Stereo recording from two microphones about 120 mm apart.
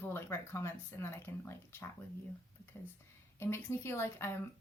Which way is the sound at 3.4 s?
20° left (ahead or behind).